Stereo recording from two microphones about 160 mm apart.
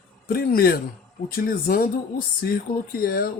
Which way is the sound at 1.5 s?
60° left (ahead or behind).